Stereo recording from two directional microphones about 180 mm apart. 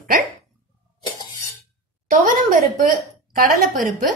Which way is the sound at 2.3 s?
45° right (ahead or behind).